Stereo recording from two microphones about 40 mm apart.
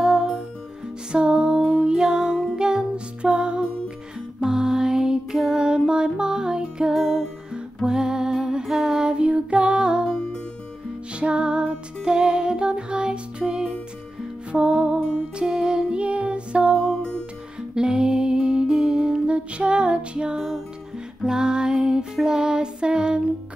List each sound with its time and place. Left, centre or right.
0.0 s music: centre
1.1 s music: right
1.6 s music: right
1.9 s music: centre
6.9 s music: centre
7.5 s music: centre
9.1 s music: right
11.1 s music: right
17.7 s music: right